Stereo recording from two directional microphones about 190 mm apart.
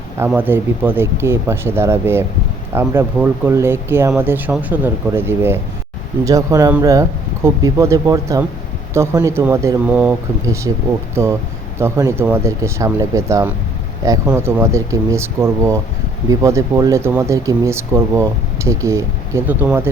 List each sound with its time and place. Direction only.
0.3 s speech: 10° right (ahead or behind)